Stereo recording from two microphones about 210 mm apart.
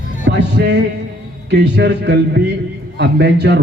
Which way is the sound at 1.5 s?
55° right (ahead or behind).